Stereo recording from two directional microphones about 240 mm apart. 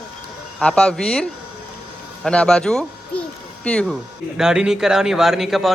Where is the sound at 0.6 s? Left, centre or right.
Centre.